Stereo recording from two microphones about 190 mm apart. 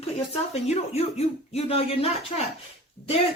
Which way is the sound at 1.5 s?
30° left (ahead or behind).